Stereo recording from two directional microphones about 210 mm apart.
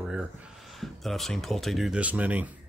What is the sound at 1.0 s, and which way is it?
Speech, centre (ahead or behind).